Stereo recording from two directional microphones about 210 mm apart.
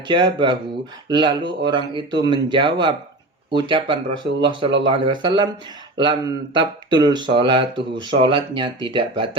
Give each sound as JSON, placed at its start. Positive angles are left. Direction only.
{"t": 0.1, "sound": "speech", "side_deg": -20}